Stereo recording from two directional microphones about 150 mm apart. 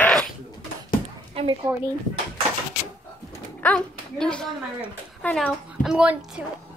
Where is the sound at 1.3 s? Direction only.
35° right (ahead or behind).